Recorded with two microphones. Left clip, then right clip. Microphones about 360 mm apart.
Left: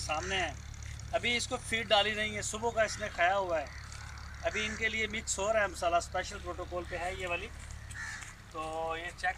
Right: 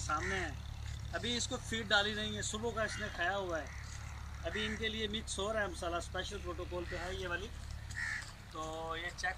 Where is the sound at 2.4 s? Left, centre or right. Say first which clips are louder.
Left 5 dB; left.